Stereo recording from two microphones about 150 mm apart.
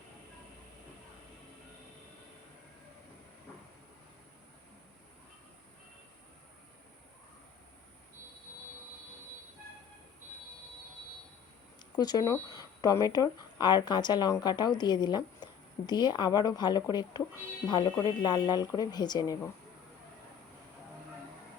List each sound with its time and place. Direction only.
11.9 s speech: 25° left (ahead or behind)